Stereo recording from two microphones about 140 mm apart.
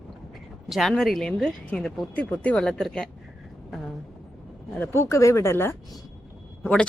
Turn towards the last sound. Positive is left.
turn(degrees=5)  # may be behind; listen again after turning